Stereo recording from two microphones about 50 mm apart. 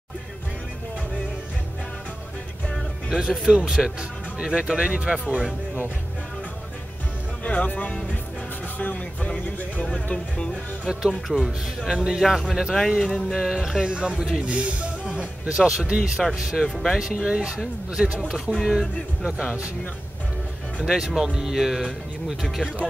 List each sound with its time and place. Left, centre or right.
3.1 s speech: centre
7.4 s speech: left
8.7 s a sound: left
10.1 s speech: centre
10.9 s speech: centre
12.2 s speech: centre
16.6 s speech: centre
17.0 s speech: centre
20.8 s speech: centre